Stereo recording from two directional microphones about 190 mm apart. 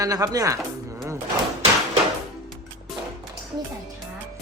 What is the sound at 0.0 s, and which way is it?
Speech, 20° right (ahead or behind).